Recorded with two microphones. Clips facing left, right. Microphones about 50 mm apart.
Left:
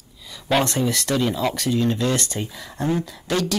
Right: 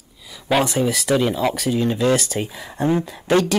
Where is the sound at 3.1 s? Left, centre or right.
Right.